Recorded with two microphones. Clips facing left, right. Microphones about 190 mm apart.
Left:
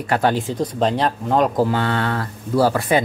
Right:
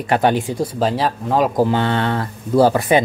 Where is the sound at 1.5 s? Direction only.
20° right (ahead or behind).